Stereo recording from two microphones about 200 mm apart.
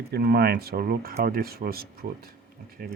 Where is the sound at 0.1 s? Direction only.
50° right (ahead or behind).